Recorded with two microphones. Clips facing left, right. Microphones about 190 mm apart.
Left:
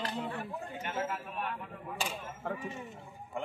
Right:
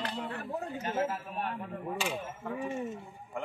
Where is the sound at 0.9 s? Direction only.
35° right (ahead or behind).